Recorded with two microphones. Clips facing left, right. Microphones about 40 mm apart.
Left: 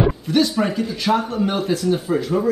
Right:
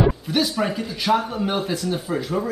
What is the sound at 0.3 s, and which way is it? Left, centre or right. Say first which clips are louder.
Speech: left 4 dB; centre.